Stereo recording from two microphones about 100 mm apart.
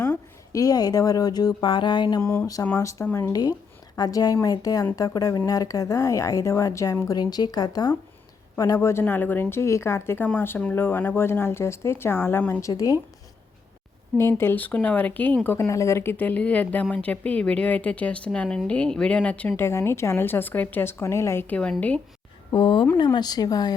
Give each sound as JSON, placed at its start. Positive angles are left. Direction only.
{"t": 0.5, "sound": "speech", "side_deg": 40}
{"t": 1.6, "sound": "mantra", "side_deg": 55}
{"t": 2.2, "sound": "speech", "side_deg": 25}
{"t": 3.9, "sound": "speech", "side_deg": 40}
{"t": 8.5, "sound": "speech", "side_deg": 30}
{"t": 12.6, "sound": "speech", "side_deg": 35}
{"t": 14.2, "sound": "speech", "side_deg": 25}
{"t": 15.4, "sound": "speech", "side_deg": 30}
{"t": 19.6, "sound": "speech", "side_deg": 25}
{"t": 22.5, "sound": "speech", "side_deg": 60}
{"t": 23.1, "sound": "mantra", "side_deg": 45}